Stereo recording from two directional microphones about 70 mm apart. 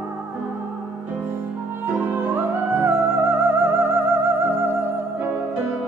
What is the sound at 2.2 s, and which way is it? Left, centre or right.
Music, right.